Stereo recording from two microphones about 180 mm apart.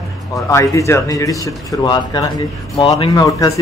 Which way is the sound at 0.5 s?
15° left (ahead or behind).